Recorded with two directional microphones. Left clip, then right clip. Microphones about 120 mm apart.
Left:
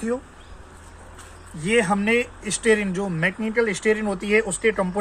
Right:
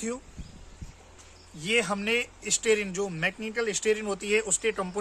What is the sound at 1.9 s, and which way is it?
Speech, 35° right (ahead or behind).